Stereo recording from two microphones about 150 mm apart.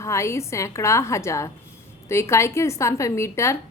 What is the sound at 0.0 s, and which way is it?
A woman's voice, 20° left (ahead or behind).